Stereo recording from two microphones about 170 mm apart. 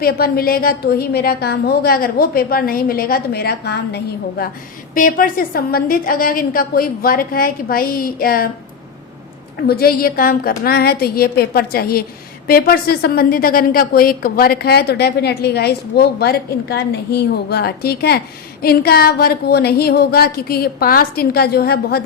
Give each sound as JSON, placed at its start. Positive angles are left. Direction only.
{"t": 0.0, "sound": "a woman's voice", "side_deg": 60}
{"t": 4.9, "sound": "a woman's voice", "side_deg": 55}
{"t": 9.6, "sound": "a woman's voice", "side_deg": 65}